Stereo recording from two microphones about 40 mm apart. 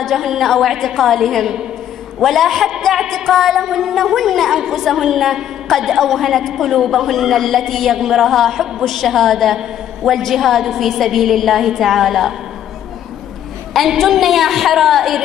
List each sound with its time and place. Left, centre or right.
0.0 s a woman's voice: centre
13.9 s a woman's voice: centre